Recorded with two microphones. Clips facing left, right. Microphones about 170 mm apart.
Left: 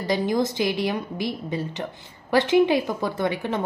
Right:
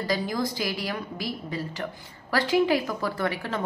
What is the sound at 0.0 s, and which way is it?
A woman's voice, 20° left (ahead or behind).